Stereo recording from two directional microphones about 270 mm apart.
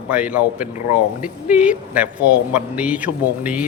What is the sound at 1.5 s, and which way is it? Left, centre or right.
Speech, centre.